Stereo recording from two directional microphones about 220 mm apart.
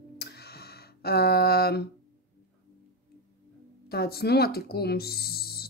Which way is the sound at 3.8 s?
45° left (ahead or behind).